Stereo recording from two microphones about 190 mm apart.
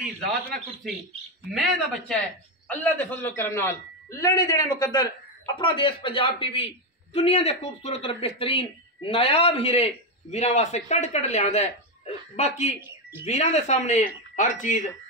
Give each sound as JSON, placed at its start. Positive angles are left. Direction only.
{"t": 0.0, "sound": "a man's voice", "side_deg": 0}
{"t": 1.5, "sound": "a man's voice", "side_deg": 0}
{"t": 2.7, "sound": "a man's voice", "side_deg": 10}